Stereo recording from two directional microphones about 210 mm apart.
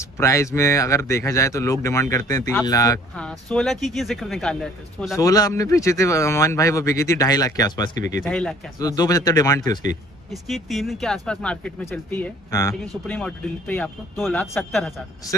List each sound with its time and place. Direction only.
0.2 s speech: 15° left (ahead or behind)
3.2 s speech: 5° left (ahead or behind)
5.1 s speech: 15° left (ahead or behind)
8.1 s speech: 5° left (ahead or behind)
8.7 s speech: 20° left (ahead or behind)
10.5 s speech: centre (ahead or behind)